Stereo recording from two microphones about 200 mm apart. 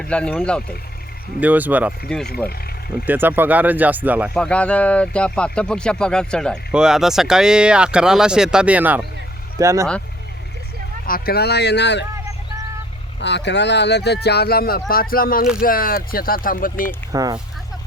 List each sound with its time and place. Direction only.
0.1 s speech: 5° left (ahead or behind)
1.4 s speech: 10° right (ahead or behind)
2.0 s speech: centre (ahead or behind)
3.1 s speech: 10° right (ahead or behind)
4.4 s speech: 5° left (ahead or behind); by 9.8 s 15° right (ahead or behind)
11.0 s speech: 50° left (ahead or behind)
13.1 s speech: 60° left (ahead or behind); by 16.9 s 45° left (ahead or behind)
17.1 s speech: 15° right (ahead or behind)